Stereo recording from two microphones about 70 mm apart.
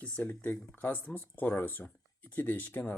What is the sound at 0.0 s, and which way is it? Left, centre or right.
Speech, left.